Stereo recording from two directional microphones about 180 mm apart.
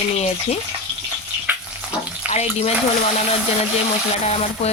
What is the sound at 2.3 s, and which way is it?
Speech, 35° left (ahead or behind).